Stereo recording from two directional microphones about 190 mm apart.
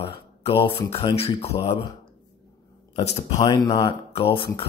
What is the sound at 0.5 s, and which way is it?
Speech, 30° left (ahead or behind).